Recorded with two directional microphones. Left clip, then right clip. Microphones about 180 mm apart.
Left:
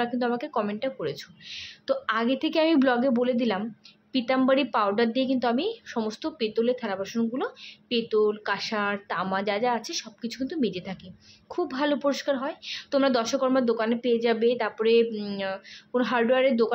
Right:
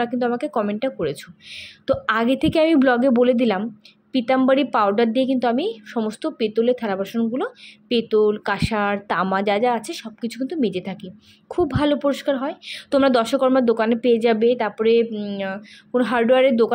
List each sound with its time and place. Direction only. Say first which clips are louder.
0.0 s a woman's voice: right 5 dB; 25° right (ahead or behind)